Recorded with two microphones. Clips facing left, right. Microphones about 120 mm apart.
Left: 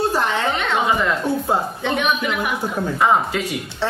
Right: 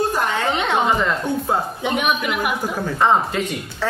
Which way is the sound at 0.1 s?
25° left (ahead or behind).